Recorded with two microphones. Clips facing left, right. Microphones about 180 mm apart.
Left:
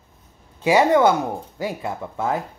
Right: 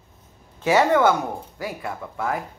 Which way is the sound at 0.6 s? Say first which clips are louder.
Left 2 dB; 15° left (ahead or behind).